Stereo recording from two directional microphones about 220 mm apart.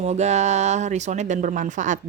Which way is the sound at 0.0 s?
30° right (ahead or behind).